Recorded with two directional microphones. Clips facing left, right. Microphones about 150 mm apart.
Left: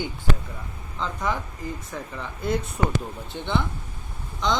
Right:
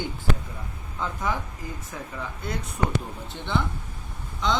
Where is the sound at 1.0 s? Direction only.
Centre (ahead or behind).